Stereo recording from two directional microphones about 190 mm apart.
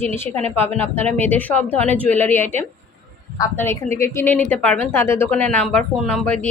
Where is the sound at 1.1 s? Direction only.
10° left (ahead or behind).